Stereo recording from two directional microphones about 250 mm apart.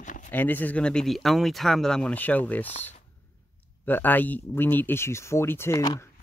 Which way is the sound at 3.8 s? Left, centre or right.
Centre.